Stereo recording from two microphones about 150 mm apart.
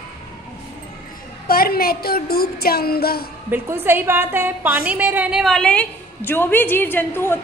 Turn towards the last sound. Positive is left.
turn(degrees=15)  # may be behind; listen again after turning